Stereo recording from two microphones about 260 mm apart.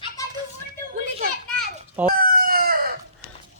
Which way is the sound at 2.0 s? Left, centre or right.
Right.